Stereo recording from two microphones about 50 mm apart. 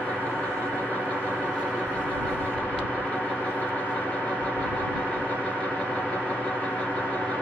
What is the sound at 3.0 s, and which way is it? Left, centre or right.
Gong, left.